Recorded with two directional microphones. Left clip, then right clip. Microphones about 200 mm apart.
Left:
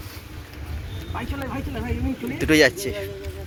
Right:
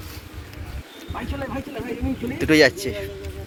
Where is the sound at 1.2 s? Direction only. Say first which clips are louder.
Right 1 dB; 15° right (ahead or behind).